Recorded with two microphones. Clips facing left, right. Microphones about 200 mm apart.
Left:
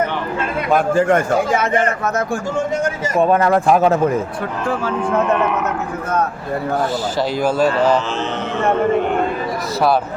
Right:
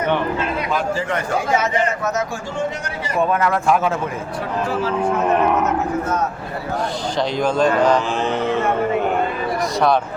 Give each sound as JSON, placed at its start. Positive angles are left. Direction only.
{"t": 0.7, "sound": "a man's voice", "side_deg": 50}
{"t": 2.8, "sound": "speech", "side_deg": 35}
{"t": 7.2, "sound": "a man's voice", "side_deg": 5}